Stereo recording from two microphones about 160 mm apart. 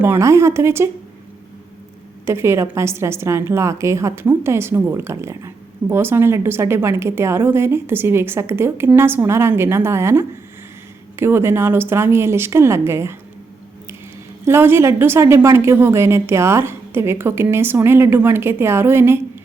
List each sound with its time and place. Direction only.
0.0 s a woman's voice: 15° right (ahead or behind)
2.2 s a woman's voice: 15° right (ahead or behind)
14.4 s a woman's voice: 15° right (ahead or behind)